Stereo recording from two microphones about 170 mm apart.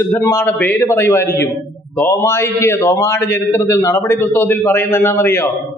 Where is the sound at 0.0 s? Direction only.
15° left (ahead or behind).